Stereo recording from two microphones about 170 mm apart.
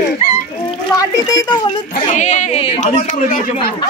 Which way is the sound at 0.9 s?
25° left (ahead or behind).